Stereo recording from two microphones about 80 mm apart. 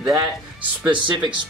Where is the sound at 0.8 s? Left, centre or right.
Right.